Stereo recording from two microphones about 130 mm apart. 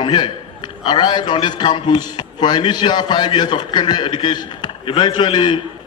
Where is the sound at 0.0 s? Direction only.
35° left (ahead or behind).